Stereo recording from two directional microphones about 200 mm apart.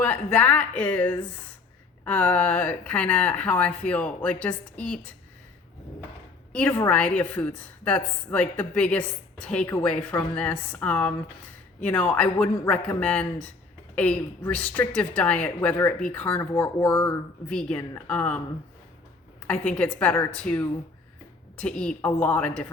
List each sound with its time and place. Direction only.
0.0 s a woman's voice: 10° left (ahead or behind)
6.5 s a woman's voice: 5° left (ahead or behind)